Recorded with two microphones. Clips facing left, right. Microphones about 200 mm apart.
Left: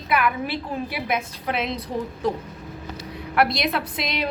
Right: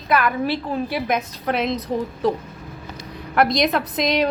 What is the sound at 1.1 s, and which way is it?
Speech, 40° right (ahead or behind).